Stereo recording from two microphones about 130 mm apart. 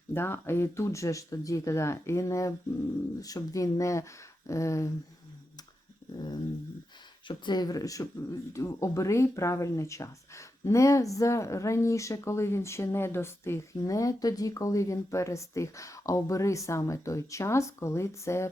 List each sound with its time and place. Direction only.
0.1 s speech: 20° left (ahead or behind)
7.3 s speech: 35° left (ahead or behind)